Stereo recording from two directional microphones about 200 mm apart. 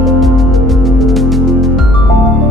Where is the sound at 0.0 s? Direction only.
Centre (ahead or behind).